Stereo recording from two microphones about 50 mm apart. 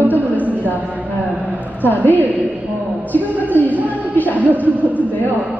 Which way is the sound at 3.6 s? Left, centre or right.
Left.